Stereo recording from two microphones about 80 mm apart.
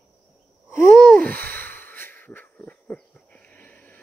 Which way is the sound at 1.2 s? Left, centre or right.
Left.